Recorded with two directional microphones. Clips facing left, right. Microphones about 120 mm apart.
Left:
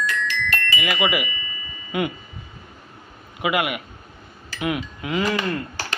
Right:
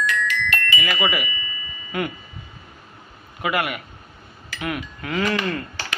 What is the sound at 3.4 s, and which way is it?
Sheep, 15° left (ahead or behind).